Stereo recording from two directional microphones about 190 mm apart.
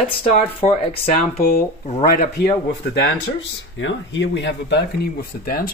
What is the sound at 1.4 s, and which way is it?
Speech, 55° left (ahead or behind).